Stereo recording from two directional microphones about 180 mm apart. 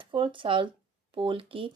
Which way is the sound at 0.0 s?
25° right (ahead or behind).